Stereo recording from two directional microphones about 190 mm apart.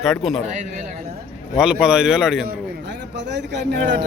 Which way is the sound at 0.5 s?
40° right (ahead or behind).